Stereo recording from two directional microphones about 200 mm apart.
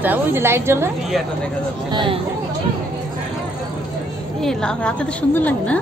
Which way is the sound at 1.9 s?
25° right (ahead or behind).